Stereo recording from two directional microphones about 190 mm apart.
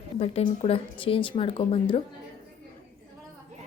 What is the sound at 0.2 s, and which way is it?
A woman's voice, 30° left (ahead or behind).